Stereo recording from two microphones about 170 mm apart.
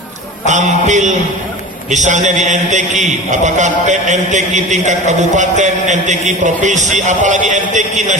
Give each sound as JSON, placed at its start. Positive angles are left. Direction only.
{"t": 0.4, "sound": "a man's voice", "side_deg": -45}